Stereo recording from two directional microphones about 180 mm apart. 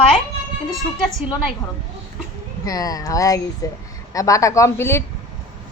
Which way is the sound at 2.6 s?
20° left (ahead or behind).